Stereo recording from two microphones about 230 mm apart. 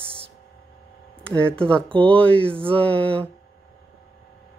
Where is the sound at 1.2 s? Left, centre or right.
Centre.